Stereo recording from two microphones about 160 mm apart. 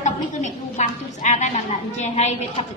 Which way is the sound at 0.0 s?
50° left (ahead or behind).